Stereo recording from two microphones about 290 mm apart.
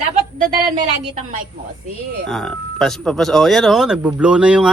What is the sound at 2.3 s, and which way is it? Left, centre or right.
Speech, centre.